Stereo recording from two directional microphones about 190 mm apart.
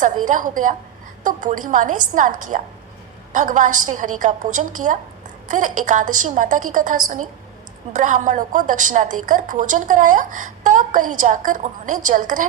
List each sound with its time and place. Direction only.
0.0 s a woman's voice: 40° right (ahead or behind)